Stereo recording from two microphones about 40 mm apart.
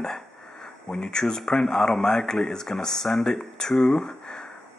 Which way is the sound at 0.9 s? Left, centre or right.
Centre.